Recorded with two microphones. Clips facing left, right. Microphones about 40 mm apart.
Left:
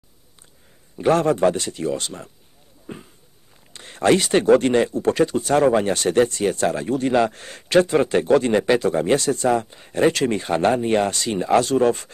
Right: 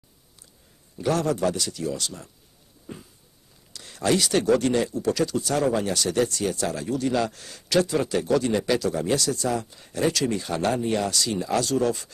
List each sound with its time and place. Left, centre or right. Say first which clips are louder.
0.9 s speech: left 6 dB; left